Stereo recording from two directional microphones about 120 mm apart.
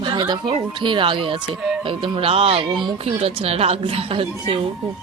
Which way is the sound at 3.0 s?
60° right (ahead or behind).